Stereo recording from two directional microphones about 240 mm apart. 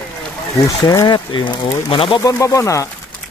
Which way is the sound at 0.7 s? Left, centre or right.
Centre.